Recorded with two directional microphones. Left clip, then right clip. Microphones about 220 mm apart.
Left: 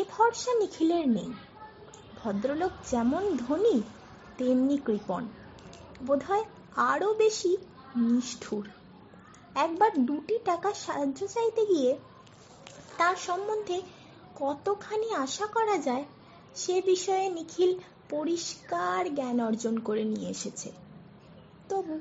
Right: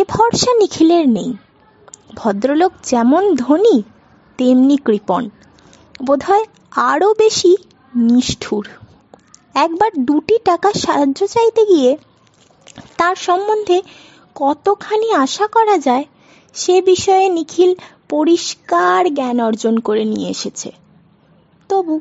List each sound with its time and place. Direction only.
0.0 s a woman's voice: 50° right (ahead or behind)
12.9 s speech: 50° right (ahead or behind)